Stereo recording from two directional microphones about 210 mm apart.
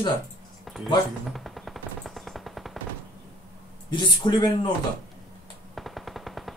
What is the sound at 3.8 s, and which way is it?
Speech, 20° left (ahead or behind).